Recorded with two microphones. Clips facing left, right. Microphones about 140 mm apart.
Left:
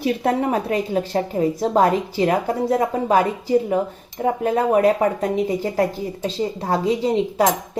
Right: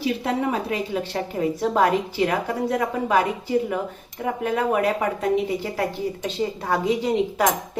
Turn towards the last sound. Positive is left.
turn(degrees=30)  # may be behind; listen again after turning